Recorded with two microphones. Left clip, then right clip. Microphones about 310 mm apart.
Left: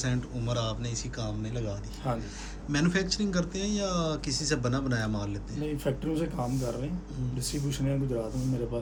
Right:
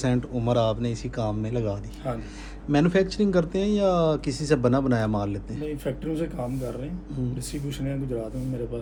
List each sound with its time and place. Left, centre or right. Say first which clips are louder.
0.0 s speech: right 8 dB; centre
2.7 s speech: right 7 dB; centre
5.6 s speech: right 1 dB; centre